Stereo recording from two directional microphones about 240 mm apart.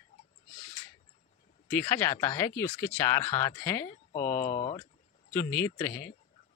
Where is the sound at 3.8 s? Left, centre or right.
Left.